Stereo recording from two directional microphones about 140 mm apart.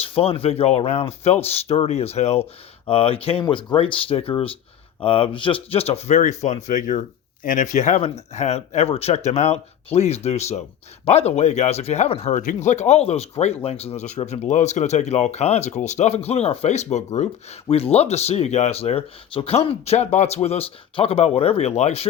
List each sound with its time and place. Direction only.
0.0 s speech: 40° left (ahead or behind)